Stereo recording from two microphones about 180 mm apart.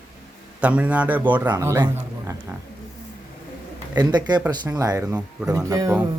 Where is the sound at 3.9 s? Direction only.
25° right (ahead or behind).